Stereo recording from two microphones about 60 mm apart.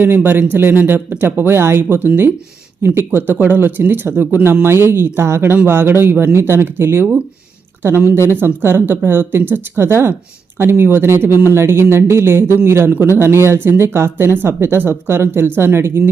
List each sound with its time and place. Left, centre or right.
0.0 s speech: right